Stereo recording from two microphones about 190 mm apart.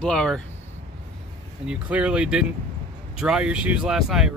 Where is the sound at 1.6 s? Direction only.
5° right (ahead or behind).